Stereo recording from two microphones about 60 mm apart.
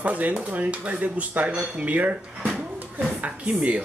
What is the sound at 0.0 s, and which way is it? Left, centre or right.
Speech, right.